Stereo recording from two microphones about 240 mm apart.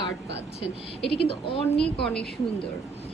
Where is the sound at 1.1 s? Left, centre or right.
Left.